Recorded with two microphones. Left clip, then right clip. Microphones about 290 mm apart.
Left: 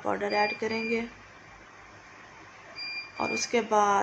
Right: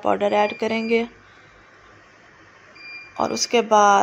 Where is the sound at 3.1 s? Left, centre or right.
Right.